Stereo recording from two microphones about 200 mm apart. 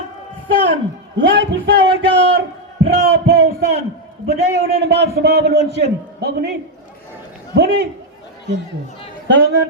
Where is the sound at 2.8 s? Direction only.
55° right (ahead or behind).